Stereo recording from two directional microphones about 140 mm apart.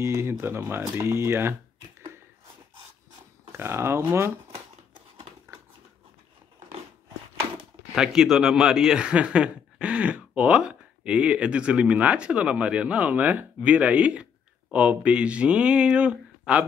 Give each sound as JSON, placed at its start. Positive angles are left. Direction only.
{"t": 0.0, "sound": "speech", "side_deg": -20}
{"t": 3.5, "sound": "speech", "side_deg": -15}
{"t": 7.9, "sound": "speech", "side_deg": -5}